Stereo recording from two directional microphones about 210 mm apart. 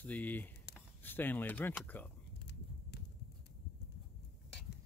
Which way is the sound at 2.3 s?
55° left (ahead or behind).